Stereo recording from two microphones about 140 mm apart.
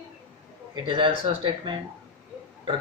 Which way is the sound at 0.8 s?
35° right (ahead or behind).